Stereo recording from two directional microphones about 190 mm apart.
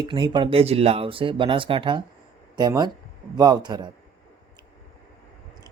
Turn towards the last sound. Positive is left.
turn(degrees=-20)  # may be behind; listen again after turning